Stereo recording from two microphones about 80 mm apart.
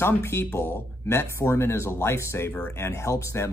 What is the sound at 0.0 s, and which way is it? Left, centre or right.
Speech, left.